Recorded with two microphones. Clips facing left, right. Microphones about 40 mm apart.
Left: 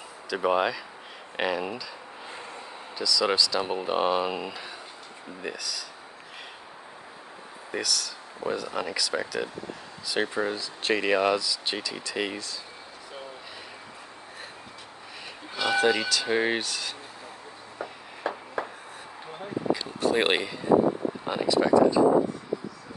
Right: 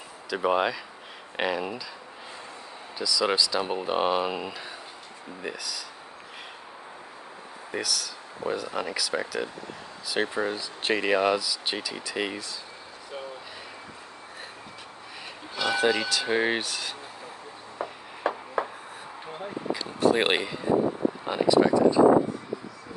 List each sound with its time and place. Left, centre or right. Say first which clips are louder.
0.3 s speech: even; centre
3.0 s speech: even; centre
7.7 s speech: left 1 dB; centre
11.0 s speech: even; centre
15.5 s music: left 1 dB; centre
15.8 s speech: even; centre
18.3 s a sound: right 3 dB; right
19.3 s a sound: left 4 dB; centre
20.0 s speech: right 3 dB; centre